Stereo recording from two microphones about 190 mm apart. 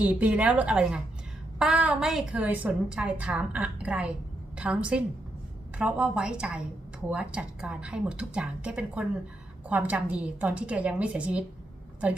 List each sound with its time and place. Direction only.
0.0 s a woman's voice: 10° right (ahead or behind)